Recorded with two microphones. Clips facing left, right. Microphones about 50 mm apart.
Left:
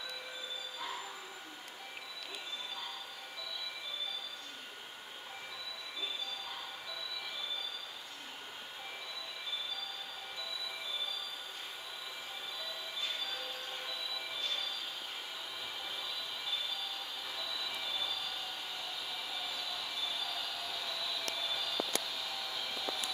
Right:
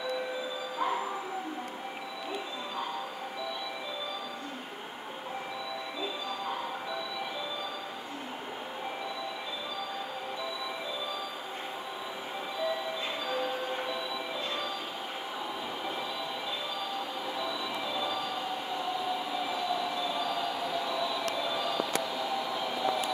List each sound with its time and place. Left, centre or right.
0.7 s music: right
13.3 s train: right
17.4 s train: centre